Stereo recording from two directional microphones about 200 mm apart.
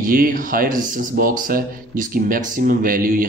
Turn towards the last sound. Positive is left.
turn(degrees=-45)  # may be behind; listen again after turning